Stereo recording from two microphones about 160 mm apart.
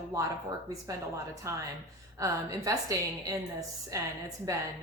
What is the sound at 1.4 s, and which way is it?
Speech, 20° right (ahead or behind).